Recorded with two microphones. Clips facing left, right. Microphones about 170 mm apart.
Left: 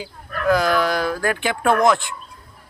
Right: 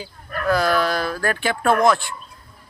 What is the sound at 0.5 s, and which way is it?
Speech, 15° left (ahead or behind).